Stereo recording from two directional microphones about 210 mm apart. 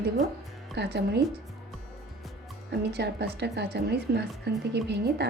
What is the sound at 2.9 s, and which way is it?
A woman's voice, 50° right (ahead or behind).